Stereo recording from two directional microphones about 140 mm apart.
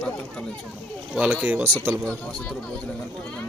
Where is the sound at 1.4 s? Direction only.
10° right (ahead or behind).